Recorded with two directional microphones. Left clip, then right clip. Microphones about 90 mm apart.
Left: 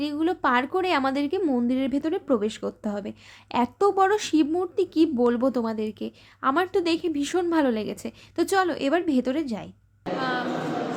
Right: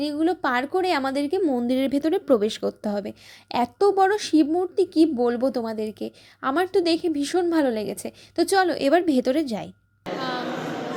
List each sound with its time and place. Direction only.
0.0 s speech: 10° right (ahead or behind)
1.6 s speech: 45° right (ahead or behind); by 3.7 s 25° right (ahead or behind)
3.8 s speech: 10° right (ahead or behind); by 9.6 s 40° right (ahead or behind)
10.2 s a sound: 10° left (ahead or behind)